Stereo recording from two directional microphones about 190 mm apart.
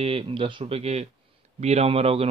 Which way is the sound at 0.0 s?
30° right (ahead or behind).